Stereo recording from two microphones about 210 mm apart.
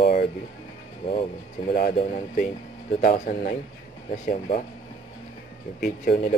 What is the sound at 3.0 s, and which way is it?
Speech, 40° left (ahead or behind).